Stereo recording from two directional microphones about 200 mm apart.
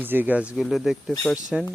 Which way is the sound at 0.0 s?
10° right (ahead or behind).